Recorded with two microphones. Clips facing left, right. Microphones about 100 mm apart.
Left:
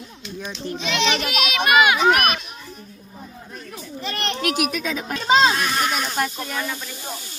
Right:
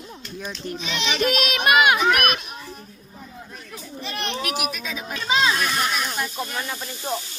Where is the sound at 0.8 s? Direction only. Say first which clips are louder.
Left 6 dB; 65° left (ahead or behind).